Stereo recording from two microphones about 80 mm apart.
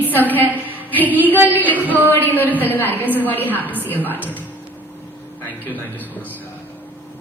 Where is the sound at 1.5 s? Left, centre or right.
Left.